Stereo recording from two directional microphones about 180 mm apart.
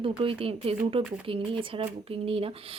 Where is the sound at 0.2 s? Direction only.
30° right (ahead or behind).